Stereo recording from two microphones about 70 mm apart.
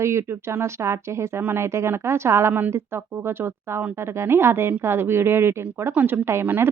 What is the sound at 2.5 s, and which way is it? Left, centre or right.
Speech, right.